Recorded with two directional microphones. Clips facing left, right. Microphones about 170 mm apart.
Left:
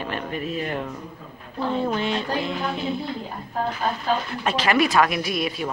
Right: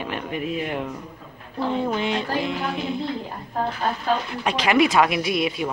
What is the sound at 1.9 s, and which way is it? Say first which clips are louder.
Speech: even; 15° right (ahead or behind).